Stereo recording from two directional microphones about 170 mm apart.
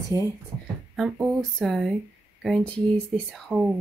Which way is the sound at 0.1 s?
20° left (ahead or behind).